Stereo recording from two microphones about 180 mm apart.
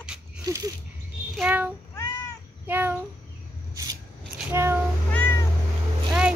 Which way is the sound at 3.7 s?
20° right (ahead or behind).